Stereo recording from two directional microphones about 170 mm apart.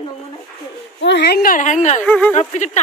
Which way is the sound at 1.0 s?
85° left.